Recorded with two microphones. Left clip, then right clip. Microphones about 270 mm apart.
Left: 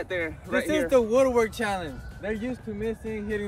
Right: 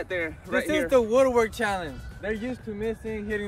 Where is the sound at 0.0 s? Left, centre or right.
Centre.